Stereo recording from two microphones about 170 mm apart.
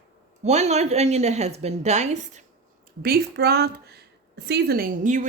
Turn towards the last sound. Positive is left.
turn(degrees=-50)  # may be behind; listen again after turning